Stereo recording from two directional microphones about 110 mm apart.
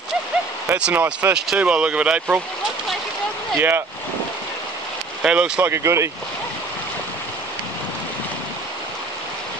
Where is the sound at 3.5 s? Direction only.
20° right (ahead or behind).